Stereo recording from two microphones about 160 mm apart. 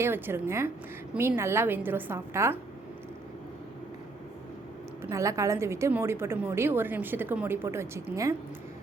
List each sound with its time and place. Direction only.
0.0 s a woman's voice: 15° right (ahead or behind)
5.0 s a woman's voice: 20° right (ahead or behind)